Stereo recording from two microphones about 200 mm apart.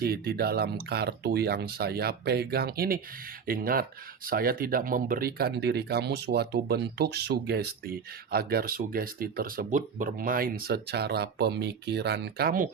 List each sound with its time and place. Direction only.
0.0 s speech: 50° right (ahead or behind)